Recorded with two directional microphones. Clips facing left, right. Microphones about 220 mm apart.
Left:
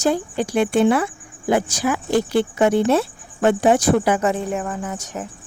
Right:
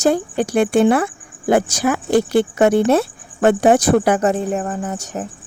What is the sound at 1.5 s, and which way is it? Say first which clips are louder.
Speech: right 3 dB; 50° right (ahead or behind).